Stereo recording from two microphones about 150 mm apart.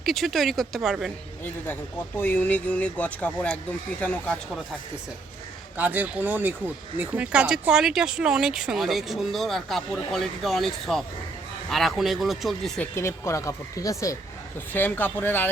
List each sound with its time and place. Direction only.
0.0 s speech: centre (ahead or behind)
1.6 s speech: 15° left (ahead or behind)
5.7 s speech: 10° right (ahead or behind)
12.9 s speech: 20° left (ahead or behind)